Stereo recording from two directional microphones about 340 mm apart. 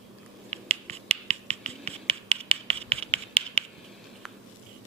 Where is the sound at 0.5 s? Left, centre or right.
Centre.